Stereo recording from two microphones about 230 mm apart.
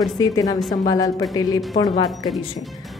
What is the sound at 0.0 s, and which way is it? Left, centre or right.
A woman's voice, centre.